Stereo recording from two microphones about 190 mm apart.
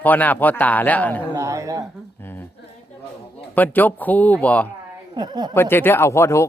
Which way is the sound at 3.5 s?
10° left (ahead or behind).